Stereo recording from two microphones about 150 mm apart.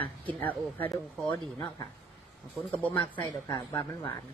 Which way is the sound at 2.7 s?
15° left (ahead or behind).